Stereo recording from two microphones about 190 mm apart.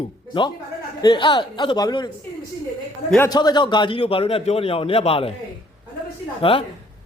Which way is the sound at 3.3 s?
20° left (ahead or behind).